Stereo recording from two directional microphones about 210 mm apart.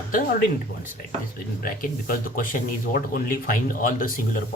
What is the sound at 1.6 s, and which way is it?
Speech, 45° left (ahead or behind).